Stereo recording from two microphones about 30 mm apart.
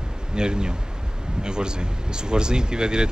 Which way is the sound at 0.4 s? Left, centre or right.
Right.